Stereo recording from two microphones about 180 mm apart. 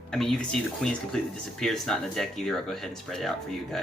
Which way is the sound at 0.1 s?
Centre (ahead or behind).